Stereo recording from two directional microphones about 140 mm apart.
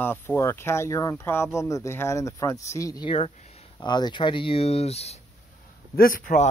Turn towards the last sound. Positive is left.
turn(degrees=70)  # may be behind; listen again after turning